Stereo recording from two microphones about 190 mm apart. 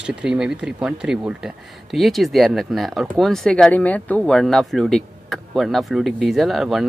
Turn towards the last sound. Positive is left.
turn(degrees=0)  # may be behind; listen again after turning